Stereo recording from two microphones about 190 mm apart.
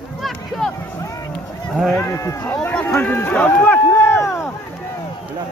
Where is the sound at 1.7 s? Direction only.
Centre (ahead or behind).